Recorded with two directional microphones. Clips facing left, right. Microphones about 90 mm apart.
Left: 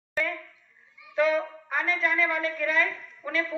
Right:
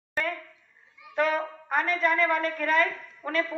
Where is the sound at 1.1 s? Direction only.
45° right (ahead or behind).